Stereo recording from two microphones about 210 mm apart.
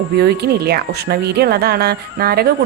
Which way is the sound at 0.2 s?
50° right (ahead or behind).